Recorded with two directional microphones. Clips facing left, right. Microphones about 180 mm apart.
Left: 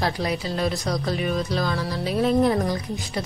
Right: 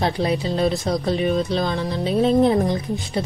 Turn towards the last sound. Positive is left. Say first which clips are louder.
# right 4 dB
turn(degrees=-25)  # may be behind; listen again after turning